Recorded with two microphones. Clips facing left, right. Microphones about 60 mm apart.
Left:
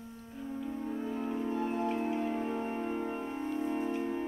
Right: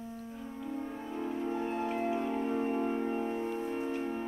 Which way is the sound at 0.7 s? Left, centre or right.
Centre.